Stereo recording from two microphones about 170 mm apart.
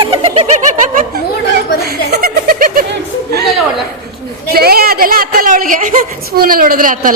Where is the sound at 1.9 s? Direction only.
65° right (ahead or behind).